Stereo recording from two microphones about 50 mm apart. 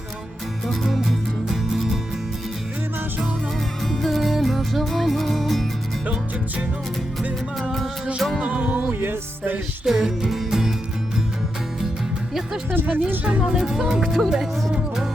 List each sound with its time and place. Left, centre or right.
0.7 s music: centre
3.9 s music: centre
8.4 s music: right
9.8 s music: centre
12.7 s speech: right
13.4 s speech: centre